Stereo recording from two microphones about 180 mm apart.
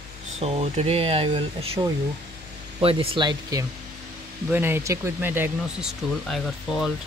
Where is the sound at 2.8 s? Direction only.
30° right (ahead or behind).